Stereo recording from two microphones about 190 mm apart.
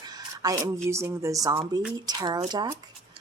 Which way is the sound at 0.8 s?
15° right (ahead or behind).